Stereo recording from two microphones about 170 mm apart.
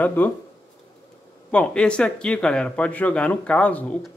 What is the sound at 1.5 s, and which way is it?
Speech, 5° left (ahead or behind).